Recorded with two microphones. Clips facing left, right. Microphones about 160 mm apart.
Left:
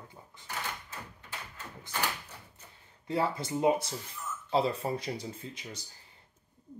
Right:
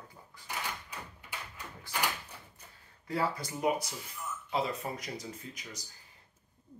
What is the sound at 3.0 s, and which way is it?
Speech, 25° left (ahead or behind).